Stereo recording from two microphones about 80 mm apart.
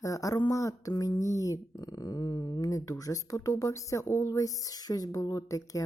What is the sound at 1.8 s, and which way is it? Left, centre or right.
Speech, left.